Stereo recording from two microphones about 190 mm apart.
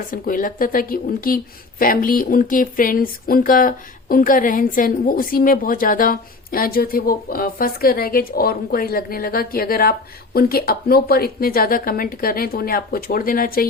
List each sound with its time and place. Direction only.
0.1 s speech: 45° left (ahead or behind)